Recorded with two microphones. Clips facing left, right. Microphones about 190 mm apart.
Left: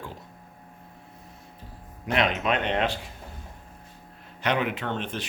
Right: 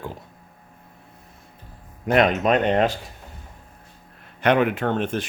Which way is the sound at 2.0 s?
45° right (ahead or behind).